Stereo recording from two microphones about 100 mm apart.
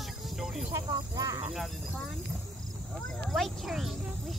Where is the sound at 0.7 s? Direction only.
40° right (ahead or behind).